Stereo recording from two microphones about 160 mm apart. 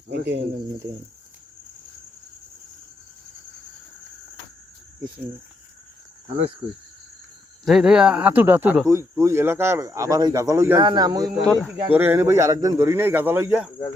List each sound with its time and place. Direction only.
0.1 s speech: 90° right
7.6 s speech: 5° right (ahead or behind); by 11.3 s 25° right (ahead or behind)
11.9 s speech: 10° right (ahead or behind)